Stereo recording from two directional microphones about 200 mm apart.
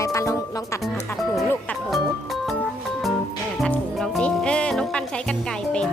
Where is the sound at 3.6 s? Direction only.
Centre (ahead or behind).